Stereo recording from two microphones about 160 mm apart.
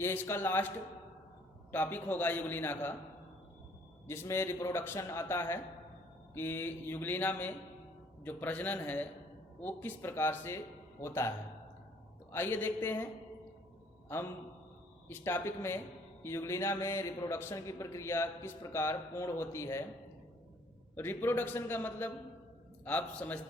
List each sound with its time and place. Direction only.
0.0 s a man's voice: 15° left (ahead or behind)
1.7 s a man's voice: 10° left (ahead or behind)
4.0 s a man's voice: 15° left (ahead or behind)
15.0 s a man's voice: 15° left (ahead or behind)
20.9 s a man's voice: 15° left (ahead or behind)